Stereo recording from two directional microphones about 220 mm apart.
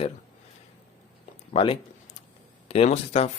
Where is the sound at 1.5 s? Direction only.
25° left (ahead or behind).